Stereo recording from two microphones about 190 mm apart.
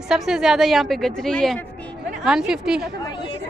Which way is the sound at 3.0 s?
25° left (ahead or behind).